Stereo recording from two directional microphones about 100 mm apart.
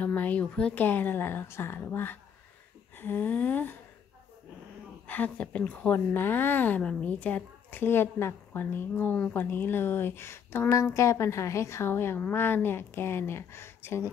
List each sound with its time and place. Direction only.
0.0 s speech: 15° left (ahead or behind)
5.0 s speech: 15° left (ahead or behind)